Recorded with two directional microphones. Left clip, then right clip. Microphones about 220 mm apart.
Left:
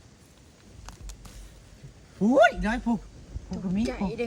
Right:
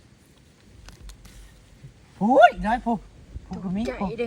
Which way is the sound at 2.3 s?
25° right (ahead or behind).